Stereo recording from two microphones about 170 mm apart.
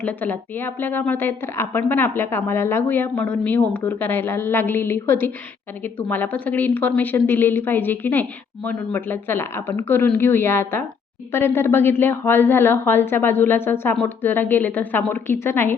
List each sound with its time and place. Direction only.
0.0 s speech: 10° left (ahead or behind)